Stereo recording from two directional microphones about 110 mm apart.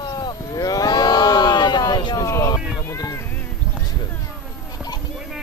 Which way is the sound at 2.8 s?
30° left (ahead or behind).